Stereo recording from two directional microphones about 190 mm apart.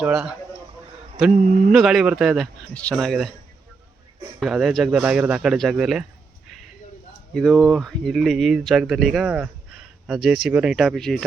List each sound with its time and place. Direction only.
0.0 s speech: 5° right (ahead or behind)
1.3 s speech: 40° right (ahead or behind)
1.7 s speech: centre (ahead or behind)
4.4 s speech: centre (ahead or behind)
7.3 s speech: centre (ahead or behind)